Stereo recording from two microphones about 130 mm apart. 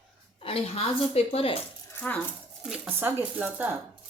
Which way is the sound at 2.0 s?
15° left (ahead or behind).